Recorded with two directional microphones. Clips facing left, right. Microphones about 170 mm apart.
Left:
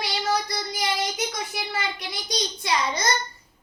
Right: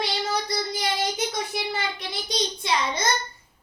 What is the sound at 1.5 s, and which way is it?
A child's voice, 25° right (ahead or behind).